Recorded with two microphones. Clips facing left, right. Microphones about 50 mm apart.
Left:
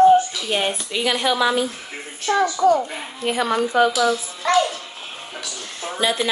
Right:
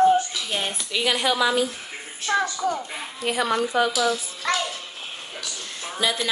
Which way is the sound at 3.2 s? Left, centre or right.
Left.